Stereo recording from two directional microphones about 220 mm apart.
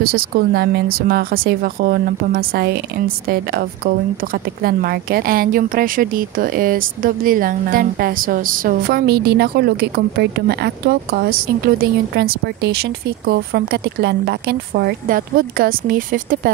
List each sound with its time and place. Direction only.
0.0 s a woman's voice: 45° right (ahead or behind)